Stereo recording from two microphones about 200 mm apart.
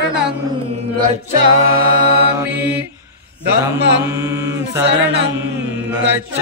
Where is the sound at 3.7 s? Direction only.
60° right (ahead or behind).